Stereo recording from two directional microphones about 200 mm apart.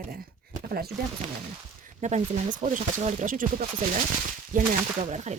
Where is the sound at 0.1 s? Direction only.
50° right (ahead or behind).